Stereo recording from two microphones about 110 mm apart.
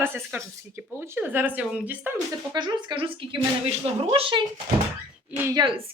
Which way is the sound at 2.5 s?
45° right (ahead or behind).